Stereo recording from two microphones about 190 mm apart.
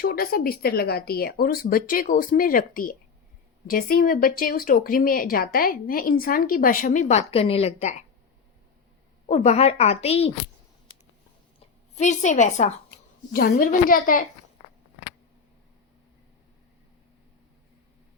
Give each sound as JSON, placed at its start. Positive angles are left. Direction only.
{"t": 0.0, "sound": "speech", "side_deg": 50}
{"t": 9.2, "sound": "a woman's voice", "side_deg": 35}
{"t": 11.9, "sound": "a woman's voice", "side_deg": 40}
{"t": 13.3, "sound": "speech", "side_deg": 50}